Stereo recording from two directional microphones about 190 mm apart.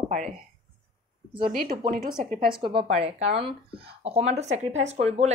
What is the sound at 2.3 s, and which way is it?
Speech, 25° right (ahead or behind).